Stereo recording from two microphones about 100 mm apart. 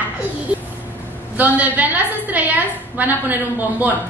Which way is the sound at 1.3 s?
15° right (ahead or behind).